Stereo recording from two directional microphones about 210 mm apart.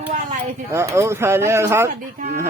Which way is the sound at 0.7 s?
15° right (ahead or behind).